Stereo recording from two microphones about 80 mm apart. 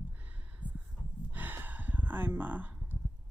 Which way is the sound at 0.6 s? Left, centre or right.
Centre.